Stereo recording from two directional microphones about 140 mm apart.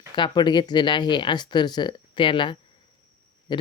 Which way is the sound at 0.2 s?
35° left (ahead or behind).